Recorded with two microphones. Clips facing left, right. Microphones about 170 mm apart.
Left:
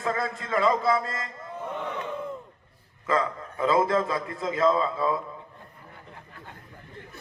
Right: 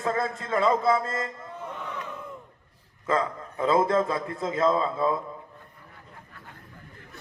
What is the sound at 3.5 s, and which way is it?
A man's voice, 30° right (ahead or behind).